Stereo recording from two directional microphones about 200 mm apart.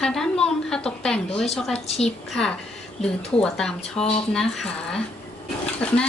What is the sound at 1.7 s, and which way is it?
Speech, 30° left (ahead or behind).